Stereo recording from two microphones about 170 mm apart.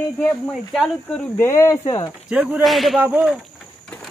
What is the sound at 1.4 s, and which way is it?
Speech, 15° left (ahead or behind).